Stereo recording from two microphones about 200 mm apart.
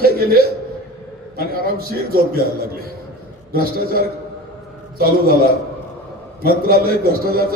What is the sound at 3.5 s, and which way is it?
Speech, 50° right (ahead or behind).